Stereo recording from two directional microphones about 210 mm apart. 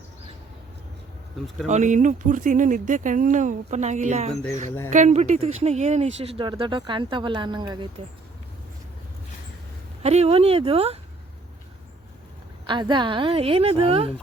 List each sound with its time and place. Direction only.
1.6 s speech: 35° right (ahead or behind)
10.0 s speech: 30° right (ahead or behind)
12.6 s speech: 20° right (ahead or behind)